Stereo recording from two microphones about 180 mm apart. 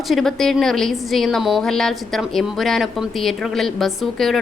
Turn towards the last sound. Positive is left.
turn(degrees=0)  # may be behind; listen again after turning